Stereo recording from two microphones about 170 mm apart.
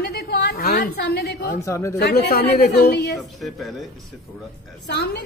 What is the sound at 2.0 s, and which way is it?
A woman's voice, 70° left (ahead or behind).